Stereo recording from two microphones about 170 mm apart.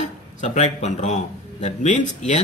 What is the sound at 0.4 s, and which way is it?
A man's voice, 40° left (ahead or behind).